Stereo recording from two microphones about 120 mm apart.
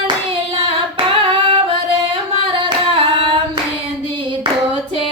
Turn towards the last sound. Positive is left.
turn(degrees=-45)  # may be behind; listen again after turning